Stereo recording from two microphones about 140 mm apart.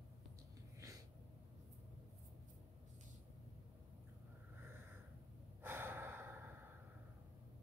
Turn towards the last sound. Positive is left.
turn(degrees=-15)  # may be behind; listen again after turning